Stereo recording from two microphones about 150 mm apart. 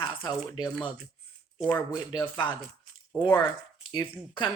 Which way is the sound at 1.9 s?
30° left (ahead or behind).